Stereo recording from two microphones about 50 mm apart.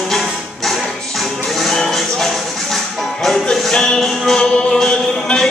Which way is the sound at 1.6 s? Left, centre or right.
Centre.